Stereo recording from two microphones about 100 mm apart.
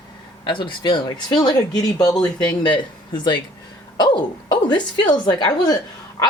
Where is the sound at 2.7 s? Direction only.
50° left (ahead or behind).